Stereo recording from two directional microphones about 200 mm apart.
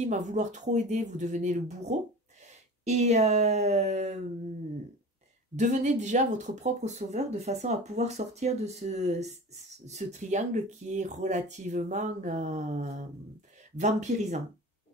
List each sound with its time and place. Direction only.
0.0 s speech: 35° right (ahead or behind)
5.6 s speech: 35° right (ahead or behind)